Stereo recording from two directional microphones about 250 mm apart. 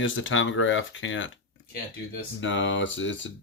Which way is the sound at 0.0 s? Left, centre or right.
Left.